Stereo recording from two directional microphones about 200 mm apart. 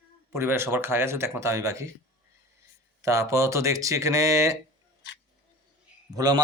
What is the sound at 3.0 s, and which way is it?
Speech, 15° right (ahead or behind).